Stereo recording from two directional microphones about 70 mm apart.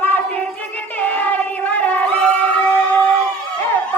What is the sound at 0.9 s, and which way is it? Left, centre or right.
Music, left.